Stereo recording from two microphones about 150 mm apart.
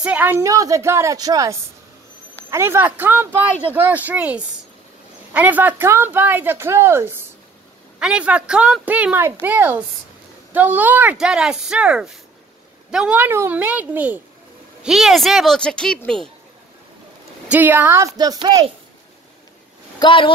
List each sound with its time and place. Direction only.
0.0 s a woman's voice: 10° right (ahead or behind)
8.0 s speech: 5° right (ahead or behind)
17.5 s a woman's voice: 10° right (ahead or behind)
20.0 s speech: 35° left (ahead or behind)